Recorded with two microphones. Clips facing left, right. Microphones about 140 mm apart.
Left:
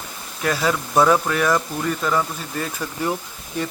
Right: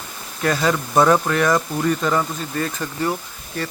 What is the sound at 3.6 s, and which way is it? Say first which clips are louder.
Speech: left 1 dB; 15° left (ahead or behind).